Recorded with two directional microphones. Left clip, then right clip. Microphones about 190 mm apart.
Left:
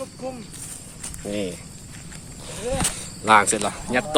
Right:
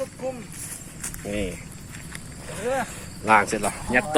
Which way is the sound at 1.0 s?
20° left (ahead or behind).